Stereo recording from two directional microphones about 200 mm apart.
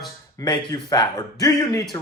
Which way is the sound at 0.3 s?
20° left (ahead or behind).